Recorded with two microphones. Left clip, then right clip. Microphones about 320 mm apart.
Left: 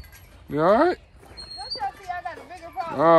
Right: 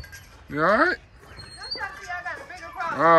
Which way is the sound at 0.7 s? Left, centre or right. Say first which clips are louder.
Left 1 dB; centre.